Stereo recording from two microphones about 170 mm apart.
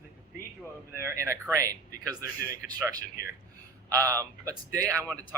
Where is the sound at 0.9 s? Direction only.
15° right (ahead or behind).